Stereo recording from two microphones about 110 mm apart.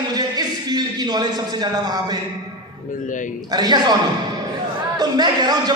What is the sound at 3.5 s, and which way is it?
A man's voice, 40° right (ahead or behind).